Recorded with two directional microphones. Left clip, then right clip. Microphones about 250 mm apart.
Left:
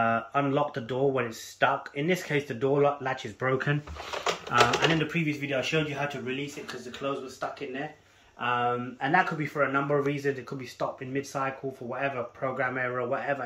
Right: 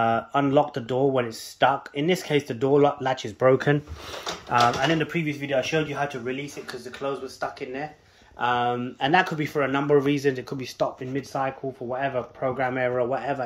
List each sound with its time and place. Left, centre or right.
0.0 s speech: right
8.4 s a man's voice: right